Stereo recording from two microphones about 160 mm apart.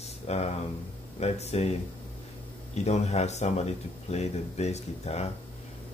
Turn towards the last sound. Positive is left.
turn(degrees=45)  # may be behind; listen again after turning